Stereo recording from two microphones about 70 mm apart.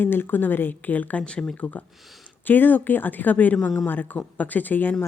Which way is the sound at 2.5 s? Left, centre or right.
Left.